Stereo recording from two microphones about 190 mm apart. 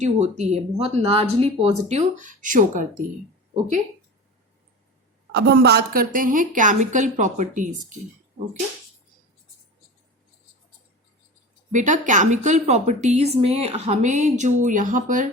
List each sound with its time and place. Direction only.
0.0 s a woman's voice: 35° right (ahead or behind)
5.3 s a woman's voice: 60° right (ahead or behind); by 7.9 s 40° right (ahead or behind)
11.7 s a woman's voice: 40° right (ahead or behind)